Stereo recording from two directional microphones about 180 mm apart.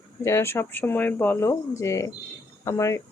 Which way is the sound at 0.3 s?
15° left (ahead or behind).